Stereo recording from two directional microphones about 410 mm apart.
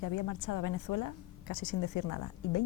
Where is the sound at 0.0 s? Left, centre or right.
Left.